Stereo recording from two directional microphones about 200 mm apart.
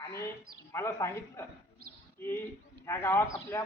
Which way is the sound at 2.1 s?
10° left (ahead or behind).